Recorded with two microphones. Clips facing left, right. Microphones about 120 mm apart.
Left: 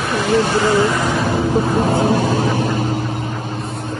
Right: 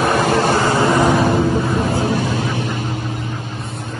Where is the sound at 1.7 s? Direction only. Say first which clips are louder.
Left 3 dB; 40° left (ahead or behind).